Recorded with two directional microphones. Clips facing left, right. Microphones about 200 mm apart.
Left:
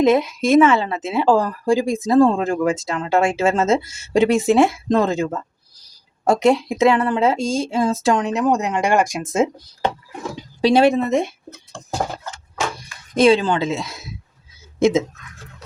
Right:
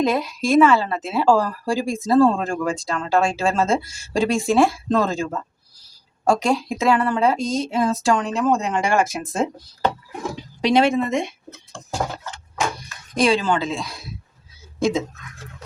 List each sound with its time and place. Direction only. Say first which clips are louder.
0.0 s speech: left 5 dB; 20° left (ahead or behind)
10.6 s speech: left 3 dB; 30° left (ahead or behind)
13.1 s speech: left 4 dB; 25° left (ahead or behind)